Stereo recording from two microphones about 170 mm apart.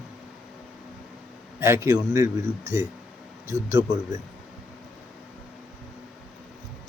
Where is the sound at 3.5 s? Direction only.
15° right (ahead or behind).